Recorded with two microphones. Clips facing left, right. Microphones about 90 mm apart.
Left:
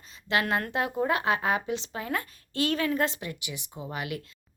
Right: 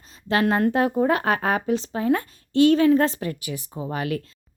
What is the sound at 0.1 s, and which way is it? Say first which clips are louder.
Speech: right 6 dB; 35° right (ahead or behind).